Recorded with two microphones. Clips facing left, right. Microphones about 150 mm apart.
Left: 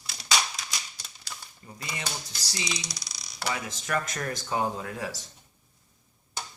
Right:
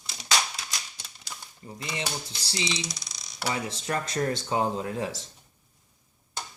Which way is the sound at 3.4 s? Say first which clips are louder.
Right 2 dB; 30° right (ahead or behind).